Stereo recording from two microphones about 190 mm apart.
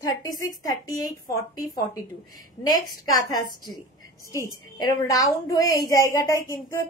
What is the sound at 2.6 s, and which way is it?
A woman's voice, 20° left (ahead or behind).